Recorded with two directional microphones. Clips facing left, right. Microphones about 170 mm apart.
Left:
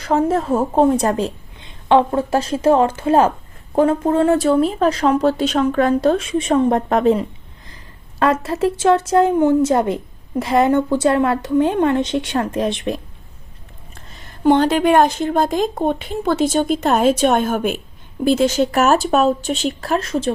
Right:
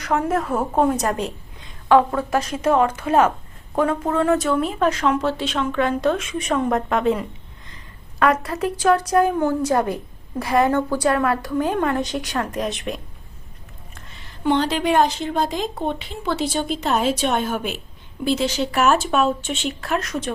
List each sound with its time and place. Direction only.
0.0 s a woman's voice: 30° left (ahead or behind)
14.3 s speech: 50° left (ahead or behind); by 20.3 s 30° left (ahead or behind)